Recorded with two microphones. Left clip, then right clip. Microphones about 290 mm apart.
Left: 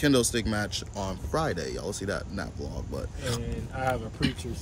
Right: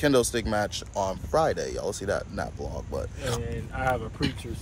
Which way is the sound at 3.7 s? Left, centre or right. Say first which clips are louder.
Right 2 dB; right.